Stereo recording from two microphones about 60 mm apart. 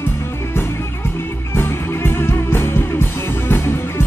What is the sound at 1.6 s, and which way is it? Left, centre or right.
Music, left.